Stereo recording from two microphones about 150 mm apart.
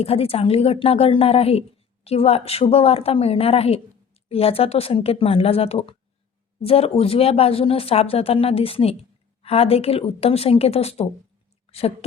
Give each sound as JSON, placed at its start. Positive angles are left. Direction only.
{"t": 0.0, "sound": "a woman's voice", "side_deg": 40}